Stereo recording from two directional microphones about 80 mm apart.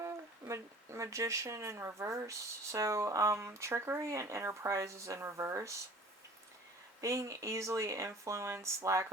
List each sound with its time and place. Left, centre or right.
0.0 s speech: right
7.0 s speech: right